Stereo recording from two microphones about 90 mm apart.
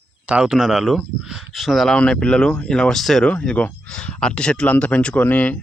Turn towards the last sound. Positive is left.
turn(degrees=20)  # may be behind; listen again after turning